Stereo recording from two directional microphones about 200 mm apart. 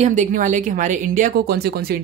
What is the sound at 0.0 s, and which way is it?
Speech, 40° right (ahead or behind).